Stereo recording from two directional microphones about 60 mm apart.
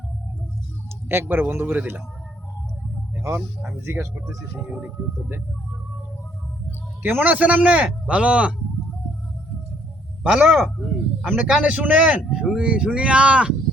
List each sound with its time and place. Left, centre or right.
1.0 s speech: right
3.2 s a sound: right
3.8 s speech: right
7.0 s a man's voice: right
7.3 s a man's voice: right
10.2 s speech: centre
11.6 s a man's voice: right
12.3 s speech: centre